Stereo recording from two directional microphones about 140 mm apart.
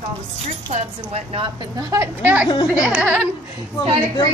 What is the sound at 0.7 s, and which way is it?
Speech, 45° right (ahead or behind).